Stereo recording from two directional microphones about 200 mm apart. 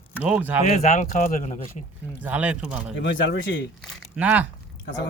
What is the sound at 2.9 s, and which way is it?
Speech, 65° left (ahead or behind).